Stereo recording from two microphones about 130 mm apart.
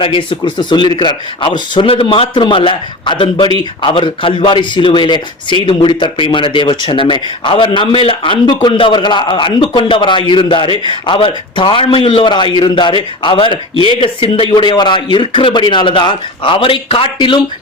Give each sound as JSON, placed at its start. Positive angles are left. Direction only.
{"t": 0.0, "sound": "speech", "side_deg": 40}